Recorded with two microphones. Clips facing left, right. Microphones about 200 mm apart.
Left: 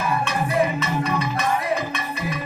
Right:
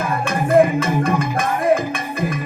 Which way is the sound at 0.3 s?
50° right (ahead or behind).